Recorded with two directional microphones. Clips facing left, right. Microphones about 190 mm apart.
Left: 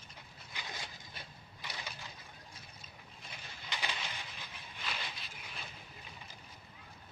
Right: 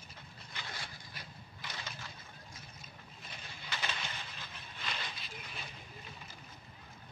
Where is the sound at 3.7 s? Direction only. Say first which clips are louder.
Even; 15° left (ahead or behind).